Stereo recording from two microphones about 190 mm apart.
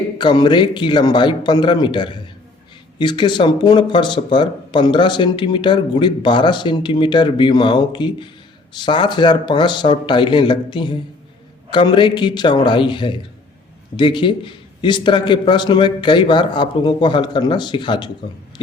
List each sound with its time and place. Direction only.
0.2 s speech: 25° left (ahead or behind)